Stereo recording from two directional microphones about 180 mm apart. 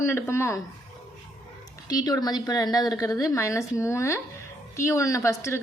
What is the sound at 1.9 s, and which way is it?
A woman's voice, 20° left (ahead or behind).